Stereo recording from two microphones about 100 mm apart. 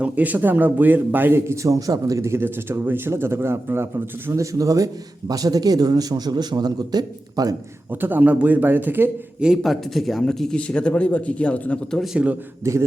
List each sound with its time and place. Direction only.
0.0 s a man's voice: 15° right (ahead or behind); by 7.5 s 40° right (ahead or behind)
7.9 s a man's voice: 20° right (ahead or behind)
9.4 s speech: 5° right (ahead or behind)
12.1 s a man's voice: 15° right (ahead or behind)
12.7 s a man's voice: 30° right (ahead or behind)